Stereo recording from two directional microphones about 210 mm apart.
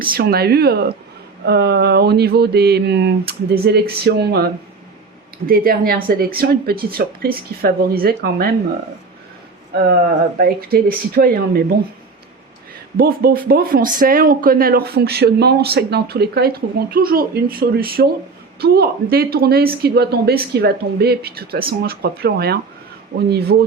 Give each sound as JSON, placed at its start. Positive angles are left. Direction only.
{"t": 0.0, "sound": "speech", "side_deg": -45}
{"t": 5.5, "sound": "speech", "side_deg": -45}
{"t": 10.3, "sound": "speech", "side_deg": -45}
{"t": 13.0, "sound": "speech", "side_deg": -45}